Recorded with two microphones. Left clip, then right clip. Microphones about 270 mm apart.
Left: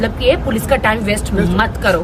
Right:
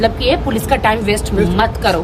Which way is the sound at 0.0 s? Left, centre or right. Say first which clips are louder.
Even; centre.